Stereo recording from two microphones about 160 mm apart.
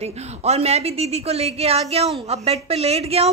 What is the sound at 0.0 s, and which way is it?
A woman's voice, 40° right (ahead or behind).